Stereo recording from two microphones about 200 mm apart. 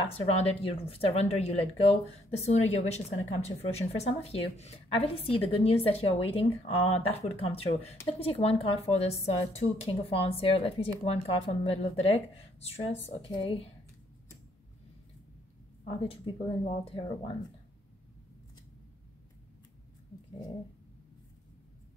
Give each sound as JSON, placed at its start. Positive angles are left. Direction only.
{"t": 0.2, "sound": "a woman's voice", "side_deg": 30}
{"t": 15.8, "sound": "a woman's voice", "side_deg": 30}